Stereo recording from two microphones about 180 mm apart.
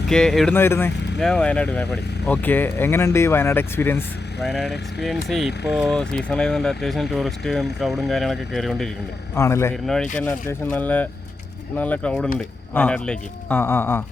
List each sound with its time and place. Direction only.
0.1 s speech: 5° left (ahead or behind)
4.4 s speech: centre (ahead or behind)
9.3 s speech: 15° left (ahead or behind)
9.8 s speech: centre (ahead or behind)